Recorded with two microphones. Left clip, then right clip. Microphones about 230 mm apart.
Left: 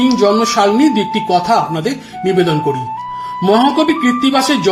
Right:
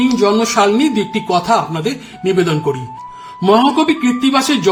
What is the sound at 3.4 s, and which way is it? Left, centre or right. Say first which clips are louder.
Speech: even; centre.